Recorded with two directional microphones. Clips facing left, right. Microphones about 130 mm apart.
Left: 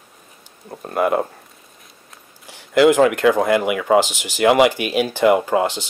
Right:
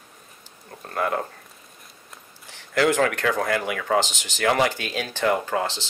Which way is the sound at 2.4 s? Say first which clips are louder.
Left 8 dB; 10° left (ahead or behind).